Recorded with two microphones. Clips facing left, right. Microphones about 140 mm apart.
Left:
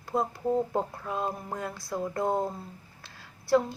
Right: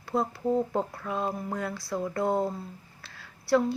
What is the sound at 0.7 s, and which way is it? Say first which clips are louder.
A woman's voice: right 1 dB; 20° left (ahead or behind).